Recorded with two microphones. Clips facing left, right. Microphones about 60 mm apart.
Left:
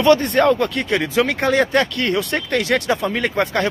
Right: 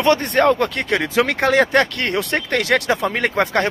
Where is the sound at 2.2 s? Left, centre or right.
Right.